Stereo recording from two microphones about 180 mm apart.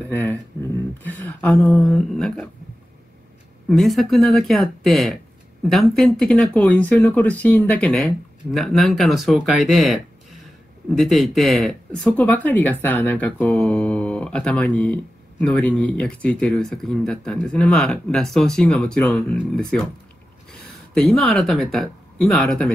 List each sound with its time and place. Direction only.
0.1 s speech: 10° left (ahead or behind)
3.6 s speech: centre (ahead or behind)
20.9 s speech: centre (ahead or behind)